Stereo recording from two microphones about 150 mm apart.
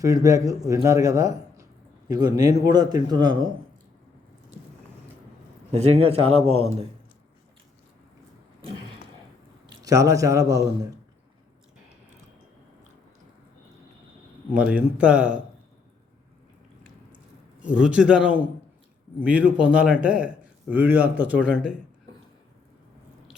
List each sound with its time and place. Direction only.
0.0 s speech: 20° right (ahead or behind)
5.7 s speech: 45° right (ahead or behind)
9.8 s speech: 20° right (ahead or behind)
14.5 s speech: 10° right (ahead or behind)
17.7 s speech: 5° right (ahead or behind)